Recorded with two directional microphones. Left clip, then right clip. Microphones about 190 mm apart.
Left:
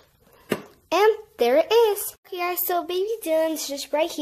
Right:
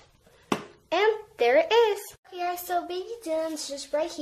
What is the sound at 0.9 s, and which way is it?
A child's voice, 40° left (ahead or behind).